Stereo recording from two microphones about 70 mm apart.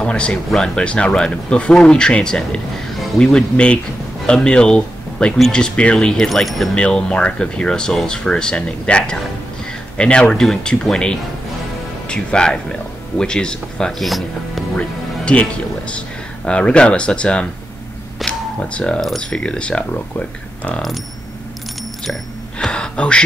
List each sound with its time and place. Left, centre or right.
0.0 s speech: centre
6.7 s speech: centre
9.7 s a sound: centre
10.4 s speech: centre
14.8 s speech: centre
16.4 s speech: centre
18.2 s a sound: centre
18.9 s speech: centre
22.6 s speech: centre